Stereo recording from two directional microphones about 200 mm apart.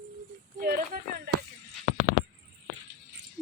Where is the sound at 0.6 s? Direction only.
45° right (ahead or behind).